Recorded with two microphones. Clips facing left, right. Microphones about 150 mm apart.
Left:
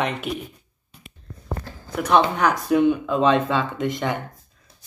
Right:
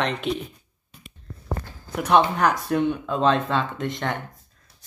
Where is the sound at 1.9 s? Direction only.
Centre (ahead or behind).